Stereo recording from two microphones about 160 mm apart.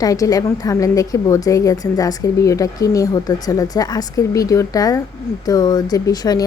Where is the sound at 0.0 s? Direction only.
20° left (ahead or behind).